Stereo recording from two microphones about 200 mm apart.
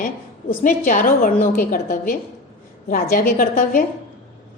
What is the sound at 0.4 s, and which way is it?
A woman's voice, 40° left (ahead or behind).